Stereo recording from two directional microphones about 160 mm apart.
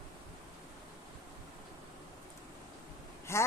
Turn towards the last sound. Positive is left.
turn(degrees=15)  # may be behind; listen again after turning